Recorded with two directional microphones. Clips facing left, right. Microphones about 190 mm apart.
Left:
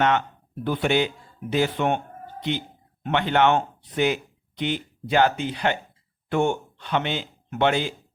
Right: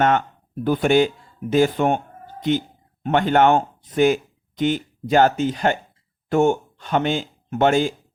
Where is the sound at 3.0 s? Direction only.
45° right (ahead or behind).